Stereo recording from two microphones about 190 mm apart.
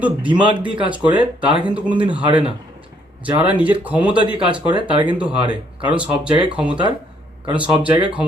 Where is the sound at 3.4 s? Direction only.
5° right (ahead or behind).